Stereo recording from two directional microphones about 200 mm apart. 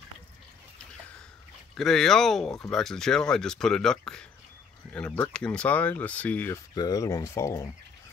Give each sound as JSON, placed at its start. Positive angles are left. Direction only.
{"t": 1.8, "sound": "speech", "side_deg": 0}